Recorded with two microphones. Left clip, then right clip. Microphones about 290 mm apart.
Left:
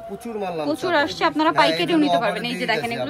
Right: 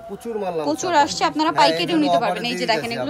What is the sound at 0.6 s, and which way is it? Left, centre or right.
Speech, centre.